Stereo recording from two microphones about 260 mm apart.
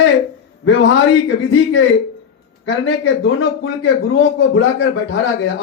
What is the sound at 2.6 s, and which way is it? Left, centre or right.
Speech, left.